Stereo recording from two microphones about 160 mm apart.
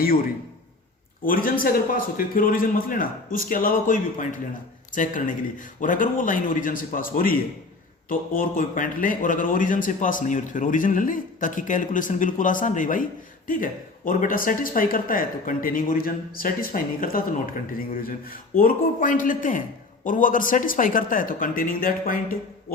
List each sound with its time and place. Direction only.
1.2 s speech: 60° left (ahead or behind)